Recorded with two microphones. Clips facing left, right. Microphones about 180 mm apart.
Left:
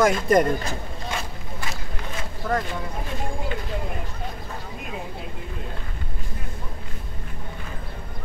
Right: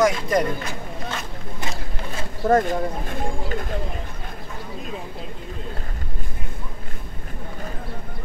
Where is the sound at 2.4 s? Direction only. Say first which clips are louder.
Right 8 dB; 45° right (ahead or behind).